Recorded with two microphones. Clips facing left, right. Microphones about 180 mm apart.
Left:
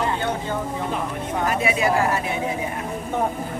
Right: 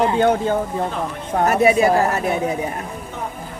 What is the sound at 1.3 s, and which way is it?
Speech, 45° right (ahead or behind).